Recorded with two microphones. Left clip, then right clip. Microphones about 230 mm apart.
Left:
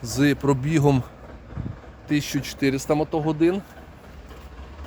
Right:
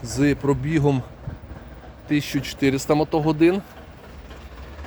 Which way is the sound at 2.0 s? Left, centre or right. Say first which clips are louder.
Right 1 dB; centre.